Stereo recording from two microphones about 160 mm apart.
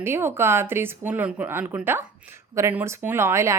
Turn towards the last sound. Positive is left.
turn(degrees=-15)  # may be behind; listen again after turning